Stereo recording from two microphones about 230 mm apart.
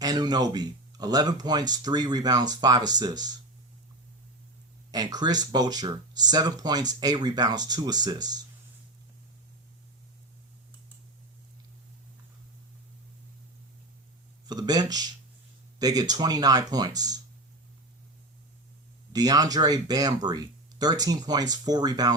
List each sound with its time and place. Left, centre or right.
0.0 s speech: centre
4.9 s speech: centre
14.4 s speech: centre
19.1 s speech: centre